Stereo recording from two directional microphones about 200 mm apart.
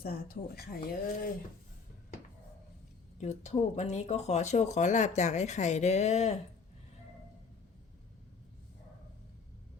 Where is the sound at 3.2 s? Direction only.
35° left (ahead or behind).